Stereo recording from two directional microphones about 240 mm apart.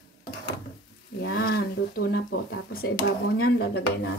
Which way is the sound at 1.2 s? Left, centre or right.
Left.